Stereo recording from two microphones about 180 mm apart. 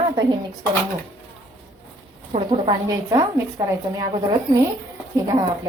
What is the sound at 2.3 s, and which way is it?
A woman's voice, 25° right (ahead or behind).